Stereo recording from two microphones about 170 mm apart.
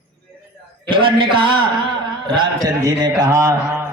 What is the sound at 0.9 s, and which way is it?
Speech, 30° right (ahead or behind).